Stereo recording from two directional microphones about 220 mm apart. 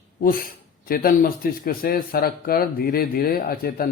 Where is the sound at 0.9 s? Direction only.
40° left (ahead or behind).